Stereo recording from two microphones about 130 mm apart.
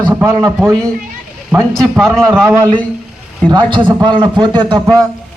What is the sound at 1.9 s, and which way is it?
Speech, 5° left (ahead or behind).